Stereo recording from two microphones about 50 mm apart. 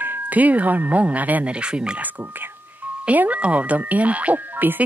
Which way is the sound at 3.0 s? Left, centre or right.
Right.